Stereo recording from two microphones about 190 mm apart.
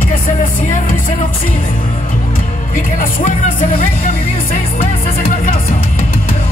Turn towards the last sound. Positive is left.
turn(degrees=50)  # may be behind; listen again after turning